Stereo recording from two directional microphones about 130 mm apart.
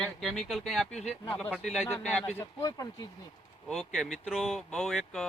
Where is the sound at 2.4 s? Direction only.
25° left (ahead or behind).